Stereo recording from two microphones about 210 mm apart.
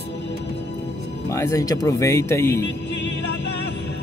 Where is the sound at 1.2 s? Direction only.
10° left (ahead or behind).